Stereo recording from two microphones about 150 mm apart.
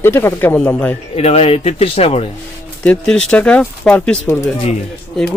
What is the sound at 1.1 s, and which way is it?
Speech, 45° left (ahead or behind).